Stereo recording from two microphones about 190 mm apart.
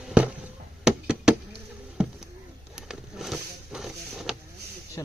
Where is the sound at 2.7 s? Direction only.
5° right (ahead or behind).